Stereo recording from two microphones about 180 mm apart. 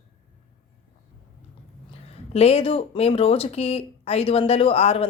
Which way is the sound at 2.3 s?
35° left (ahead or behind).